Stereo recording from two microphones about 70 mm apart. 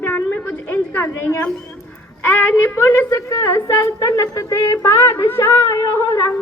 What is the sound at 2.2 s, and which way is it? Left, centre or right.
A woman's voice, left.